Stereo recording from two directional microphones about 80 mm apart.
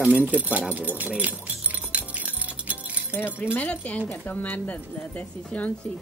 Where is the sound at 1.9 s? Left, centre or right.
Centre.